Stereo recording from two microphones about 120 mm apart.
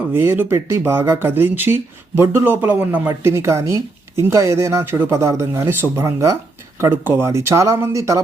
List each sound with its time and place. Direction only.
0.1 s speech: 20° right (ahead or behind)